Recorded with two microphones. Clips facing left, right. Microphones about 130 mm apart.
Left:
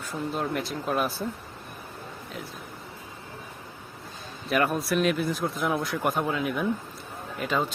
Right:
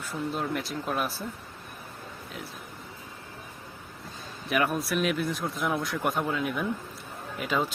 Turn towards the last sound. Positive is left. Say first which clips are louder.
# left 1 dB
turn(degrees=0)  # may be behind; listen again after turning